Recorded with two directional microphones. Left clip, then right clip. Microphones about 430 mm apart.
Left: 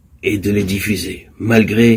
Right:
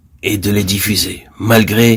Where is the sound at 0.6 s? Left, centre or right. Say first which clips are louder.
Right 4 dB; right.